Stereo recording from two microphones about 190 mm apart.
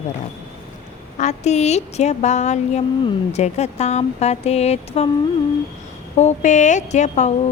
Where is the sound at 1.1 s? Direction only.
35° left (ahead or behind).